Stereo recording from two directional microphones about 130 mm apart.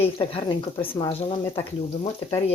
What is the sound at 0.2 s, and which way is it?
Speech, 40° left (ahead or behind).